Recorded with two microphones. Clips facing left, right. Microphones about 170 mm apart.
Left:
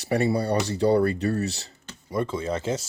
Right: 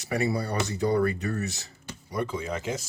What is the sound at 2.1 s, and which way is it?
Speech, 15° right (ahead or behind).